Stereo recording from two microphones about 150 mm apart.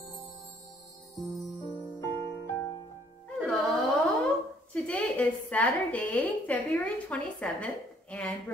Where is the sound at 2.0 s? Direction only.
20° left (ahead or behind).